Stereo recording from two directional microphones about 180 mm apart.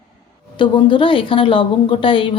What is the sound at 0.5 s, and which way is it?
A woman's voice, 25° left (ahead or behind).